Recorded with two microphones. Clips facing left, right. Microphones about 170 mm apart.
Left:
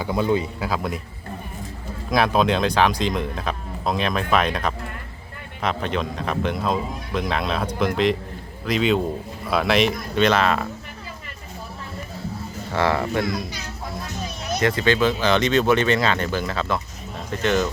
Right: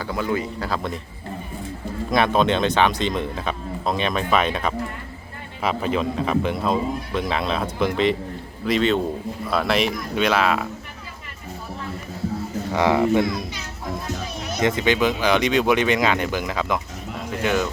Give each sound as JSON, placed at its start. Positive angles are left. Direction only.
{"t": 0.0, "sound": "speech", "side_deg": 20}
{"t": 0.6, "sound": "a man's voice", "side_deg": 5}
{"t": 2.0, "sound": "a man's voice", "side_deg": 0}
{"t": 12.7, "sound": "speech", "side_deg": -15}
{"t": 14.6, "sound": "speech", "side_deg": -20}